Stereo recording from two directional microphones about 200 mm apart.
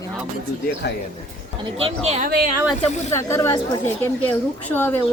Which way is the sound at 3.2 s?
15° left (ahead or behind).